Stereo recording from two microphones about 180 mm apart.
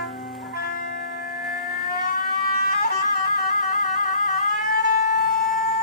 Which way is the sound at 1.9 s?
55° left (ahead or behind).